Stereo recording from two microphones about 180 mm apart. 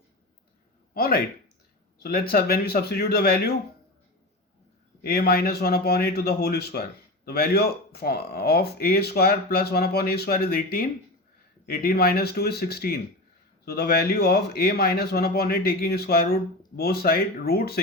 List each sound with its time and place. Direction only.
0.9 s speech: 60° left (ahead or behind)
5.0 s speech: 60° left (ahead or behind)